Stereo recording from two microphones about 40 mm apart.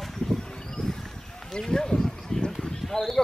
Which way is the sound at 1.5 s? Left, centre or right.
Centre.